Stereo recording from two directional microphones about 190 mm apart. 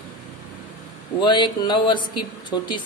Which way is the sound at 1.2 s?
25° left (ahead or behind).